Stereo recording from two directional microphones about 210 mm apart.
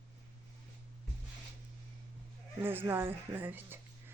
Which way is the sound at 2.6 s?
10° right (ahead or behind).